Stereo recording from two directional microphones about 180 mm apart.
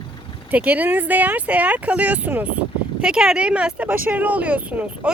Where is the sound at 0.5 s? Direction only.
10° right (ahead or behind).